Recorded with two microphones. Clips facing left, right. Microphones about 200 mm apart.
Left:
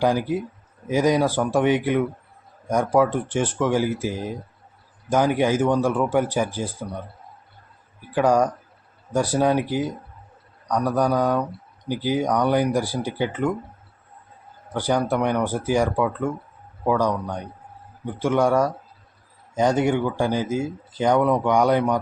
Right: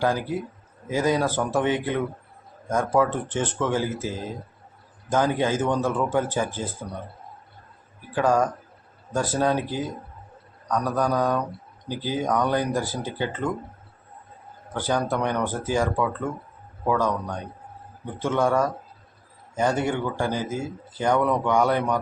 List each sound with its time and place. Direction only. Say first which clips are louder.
0.0 s speech: left 3 dB; 15° left (ahead or behind)
8.1 s speech: left 3 dB; 15° left (ahead or behind)
14.7 s speech: left 3 dB; 15° left (ahead or behind)